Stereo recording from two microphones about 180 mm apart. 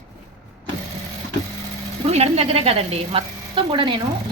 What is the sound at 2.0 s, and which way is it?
A woman's voice, 35° right (ahead or behind).